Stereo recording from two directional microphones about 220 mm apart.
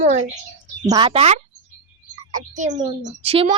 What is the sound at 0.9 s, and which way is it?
A woman's voice, 20° right (ahead or behind).